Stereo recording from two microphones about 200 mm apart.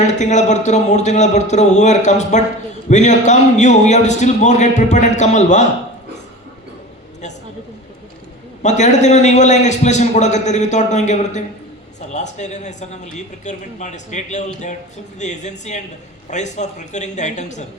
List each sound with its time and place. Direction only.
0.0 s a man's voice: 35° left (ahead or behind)
8.6 s a man's voice: 35° left (ahead or behind)